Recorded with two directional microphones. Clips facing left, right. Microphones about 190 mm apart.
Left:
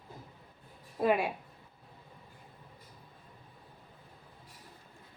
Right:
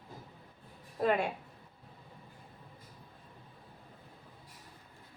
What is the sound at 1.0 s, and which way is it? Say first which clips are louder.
Speech: left 2 dB; 5° left (ahead or behind).